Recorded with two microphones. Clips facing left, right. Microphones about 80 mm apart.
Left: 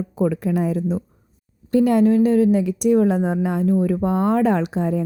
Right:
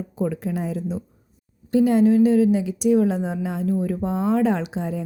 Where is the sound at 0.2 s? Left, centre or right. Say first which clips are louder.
Left 5 dB; left.